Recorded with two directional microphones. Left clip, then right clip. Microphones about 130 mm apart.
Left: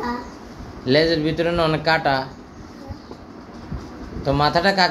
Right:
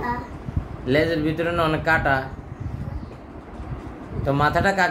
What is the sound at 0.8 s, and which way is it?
Speech, 25° left (ahead or behind).